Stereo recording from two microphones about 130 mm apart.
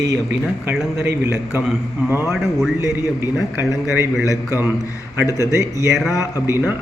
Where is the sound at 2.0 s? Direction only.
20° right (ahead or behind).